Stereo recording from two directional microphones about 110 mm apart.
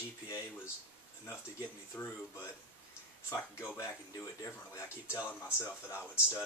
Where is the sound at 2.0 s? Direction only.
20° left (ahead or behind).